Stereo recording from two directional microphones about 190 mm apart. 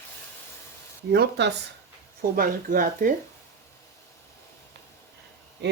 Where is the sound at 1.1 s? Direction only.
60° right (ahead or behind).